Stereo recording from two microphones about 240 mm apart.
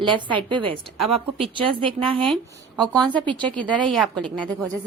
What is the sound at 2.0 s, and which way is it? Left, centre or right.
A woman's voice, right.